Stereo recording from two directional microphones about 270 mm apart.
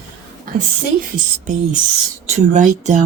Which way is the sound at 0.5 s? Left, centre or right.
Right.